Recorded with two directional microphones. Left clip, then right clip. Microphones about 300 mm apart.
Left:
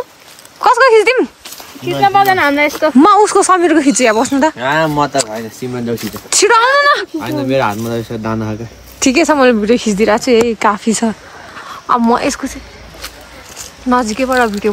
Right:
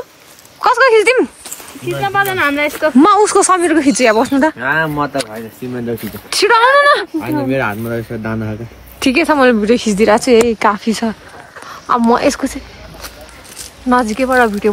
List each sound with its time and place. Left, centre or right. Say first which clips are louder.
0.6 s a sound: left 2 dB; centre
2.0 s speech: left 5 dB; centre
3.0 s speech: left 1 dB; centre
4.6 s speech: left 2 dB; left
6.3 s speech: even; centre
13.8 s speech: even; centre